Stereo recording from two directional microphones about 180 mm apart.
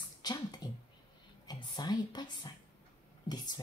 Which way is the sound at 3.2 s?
25° left (ahead or behind).